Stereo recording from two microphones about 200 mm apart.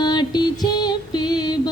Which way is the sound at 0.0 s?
20° left (ahead or behind).